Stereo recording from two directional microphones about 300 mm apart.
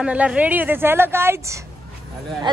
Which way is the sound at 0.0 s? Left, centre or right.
Centre.